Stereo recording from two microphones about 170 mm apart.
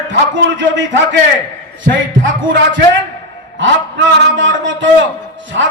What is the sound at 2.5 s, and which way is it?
A man's voice, 90° right.